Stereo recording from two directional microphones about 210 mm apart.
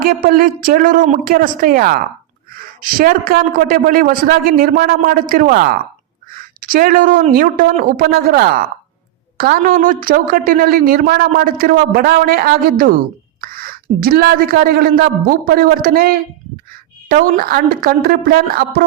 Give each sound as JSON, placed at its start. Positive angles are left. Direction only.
{"t": 0.0, "sound": "a woman's voice", "side_deg": -45}